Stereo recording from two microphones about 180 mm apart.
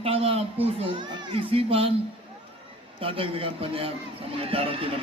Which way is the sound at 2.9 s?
30° right (ahead or behind).